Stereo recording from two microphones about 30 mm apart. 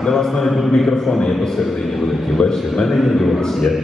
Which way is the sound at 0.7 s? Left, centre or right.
Centre.